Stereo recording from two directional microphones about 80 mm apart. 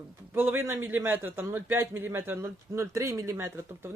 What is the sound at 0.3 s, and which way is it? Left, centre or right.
A man's voice, right.